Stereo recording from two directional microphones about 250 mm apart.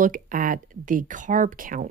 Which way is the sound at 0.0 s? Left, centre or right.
Right.